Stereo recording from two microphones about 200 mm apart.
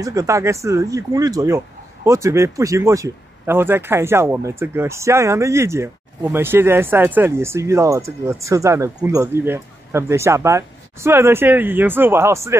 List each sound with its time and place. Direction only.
0.0 s speech: 15° right (ahead or behind)